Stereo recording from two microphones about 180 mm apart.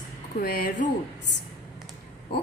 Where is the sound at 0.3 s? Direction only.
55° left (ahead or behind).